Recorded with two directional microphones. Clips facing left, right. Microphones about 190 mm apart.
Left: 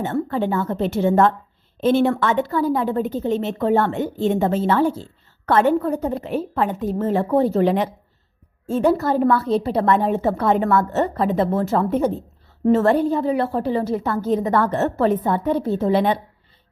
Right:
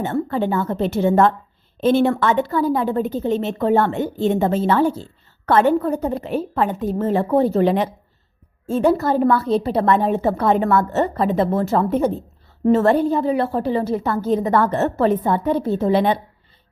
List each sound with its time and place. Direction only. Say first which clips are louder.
0.0 s a woman's voice: right 1 dB; 25° right (ahead or behind)